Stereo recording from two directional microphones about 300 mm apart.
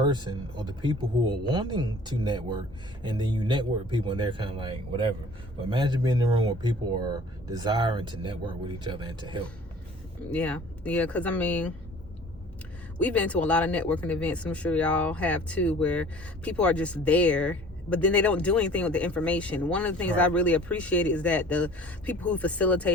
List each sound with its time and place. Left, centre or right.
0.1 s speech: centre
10.3 s speech: centre
13.0 s speech: centre